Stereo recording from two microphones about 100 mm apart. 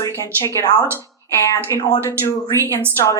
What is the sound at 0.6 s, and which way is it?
Speech, 40° left (ahead or behind).